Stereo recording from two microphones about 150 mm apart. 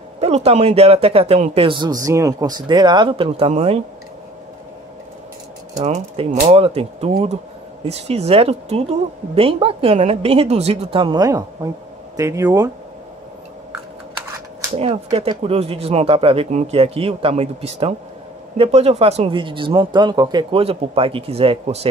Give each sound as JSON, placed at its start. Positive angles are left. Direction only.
{"t": 0.2, "sound": "speech", "side_deg": -45}
{"t": 2.0, "sound": "speech", "side_deg": -20}
{"t": 5.8, "sound": "speech", "side_deg": -45}
{"t": 14.8, "sound": "speech", "side_deg": -35}